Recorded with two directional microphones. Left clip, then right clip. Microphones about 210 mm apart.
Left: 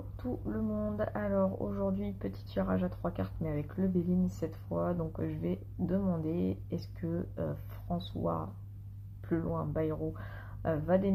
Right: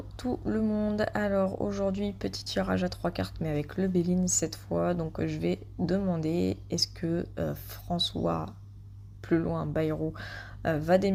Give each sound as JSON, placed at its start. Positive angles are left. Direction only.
{"t": 0.2, "sound": "speech", "side_deg": -35}